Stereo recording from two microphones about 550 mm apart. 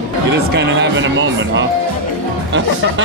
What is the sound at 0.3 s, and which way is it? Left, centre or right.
Speech, centre.